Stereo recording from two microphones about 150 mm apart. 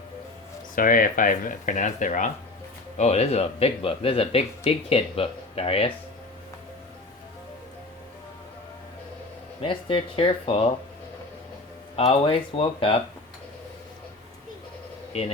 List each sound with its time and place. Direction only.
0.8 s speech: 70° left (ahead or behind)
3.0 s speech: 45° left (ahead or behind)
9.6 s speech: 35° left (ahead or behind)
11.9 s speech: 40° left (ahead or behind)
15.1 s speech: 45° left (ahead or behind)